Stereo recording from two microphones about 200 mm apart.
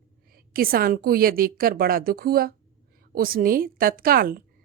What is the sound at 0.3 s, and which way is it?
A woman's voice, 45° right (ahead or behind).